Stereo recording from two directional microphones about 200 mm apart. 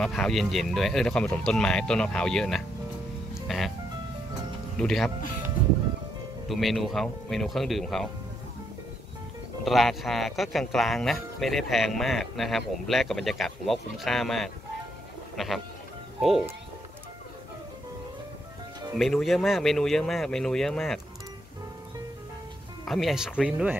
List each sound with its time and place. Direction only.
0.0 s speech: centre (ahead or behind)
3.4 s music: centre (ahead or behind)
4.7 s speech: centre (ahead or behind)
6.4 s speech: centre (ahead or behind)
9.7 s speech: centre (ahead or behind)
18.9 s speech: centre (ahead or behind)
22.8 s speech: centre (ahead or behind)